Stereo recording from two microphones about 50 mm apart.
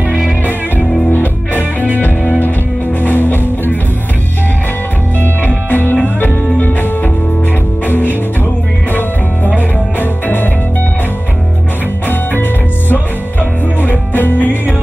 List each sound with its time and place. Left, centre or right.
1.1 s music: left
5.2 s music: left
9.6 s music: left
12.1 s music: left